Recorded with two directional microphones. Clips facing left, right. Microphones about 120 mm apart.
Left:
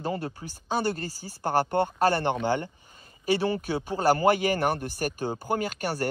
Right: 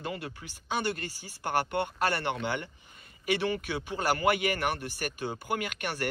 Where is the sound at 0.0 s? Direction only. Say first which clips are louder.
Left 6 dB; 35° left (ahead or behind).